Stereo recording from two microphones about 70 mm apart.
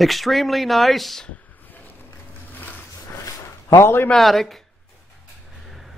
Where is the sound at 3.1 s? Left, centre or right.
Left.